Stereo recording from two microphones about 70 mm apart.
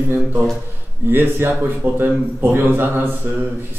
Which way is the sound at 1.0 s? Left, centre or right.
Right.